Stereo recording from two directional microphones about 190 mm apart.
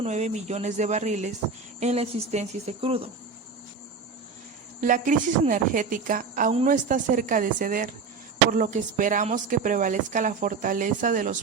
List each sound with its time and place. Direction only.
0.0 s speech: 35° right (ahead or behind)
4.8 s speech: 45° right (ahead or behind)